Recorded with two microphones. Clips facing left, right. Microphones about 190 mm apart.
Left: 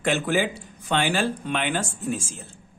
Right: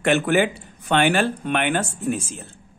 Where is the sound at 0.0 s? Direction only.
65° right (ahead or behind).